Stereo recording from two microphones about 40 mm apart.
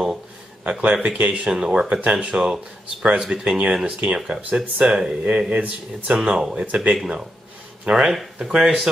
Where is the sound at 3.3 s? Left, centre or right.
Right.